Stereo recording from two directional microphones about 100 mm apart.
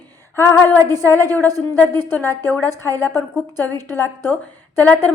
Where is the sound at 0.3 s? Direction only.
25° left (ahead or behind).